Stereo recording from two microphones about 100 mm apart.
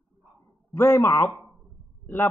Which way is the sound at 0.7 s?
25° left (ahead or behind).